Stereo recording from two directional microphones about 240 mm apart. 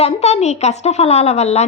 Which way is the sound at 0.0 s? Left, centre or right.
Left.